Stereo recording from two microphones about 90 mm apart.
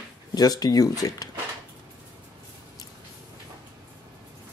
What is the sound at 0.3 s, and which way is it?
Speech, 45° left (ahead or behind).